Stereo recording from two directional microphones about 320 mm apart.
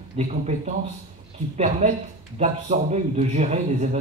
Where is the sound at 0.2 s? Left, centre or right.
Right.